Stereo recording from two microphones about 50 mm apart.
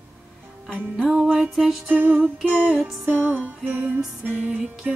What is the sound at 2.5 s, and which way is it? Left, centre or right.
Music, centre.